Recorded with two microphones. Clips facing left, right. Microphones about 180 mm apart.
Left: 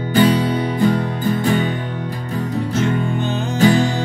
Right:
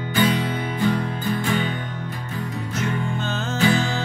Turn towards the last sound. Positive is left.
turn(degrees=40)  # may be behind; listen again after turning